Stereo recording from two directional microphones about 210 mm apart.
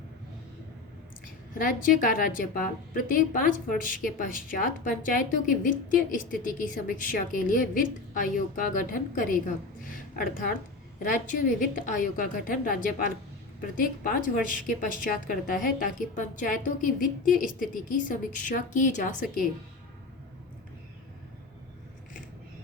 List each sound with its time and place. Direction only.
1.5 s a woman's voice: 40° left (ahead or behind)